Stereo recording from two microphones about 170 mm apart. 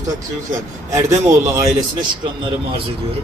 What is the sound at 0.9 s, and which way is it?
Speech, 15° right (ahead or behind).